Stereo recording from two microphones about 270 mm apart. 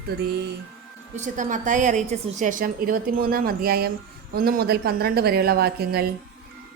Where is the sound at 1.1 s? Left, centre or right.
Right.